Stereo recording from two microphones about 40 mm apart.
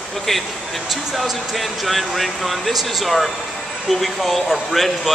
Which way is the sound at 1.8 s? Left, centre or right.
Centre.